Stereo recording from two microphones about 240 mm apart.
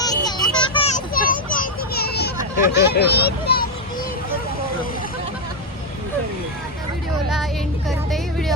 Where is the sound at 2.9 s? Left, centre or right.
Left.